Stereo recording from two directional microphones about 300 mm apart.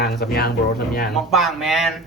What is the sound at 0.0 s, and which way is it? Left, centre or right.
Speech, left.